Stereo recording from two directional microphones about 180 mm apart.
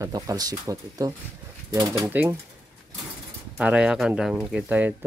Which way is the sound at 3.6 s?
5° right (ahead or behind).